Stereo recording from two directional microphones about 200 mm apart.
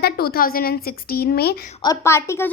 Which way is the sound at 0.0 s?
50° left (ahead or behind).